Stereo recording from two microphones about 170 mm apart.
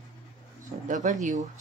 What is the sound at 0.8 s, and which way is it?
Speech, 50° right (ahead or behind).